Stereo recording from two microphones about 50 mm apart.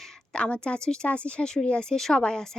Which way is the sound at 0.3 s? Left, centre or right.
Left.